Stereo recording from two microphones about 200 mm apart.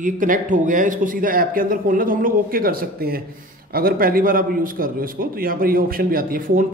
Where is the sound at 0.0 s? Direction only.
40° right (ahead or behind).